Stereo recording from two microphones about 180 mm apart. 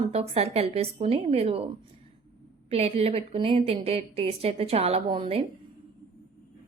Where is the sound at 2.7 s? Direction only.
35° right (ahead or behind).